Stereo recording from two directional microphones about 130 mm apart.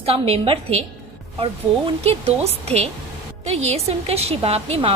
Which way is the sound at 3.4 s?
55° right (ahead or behind).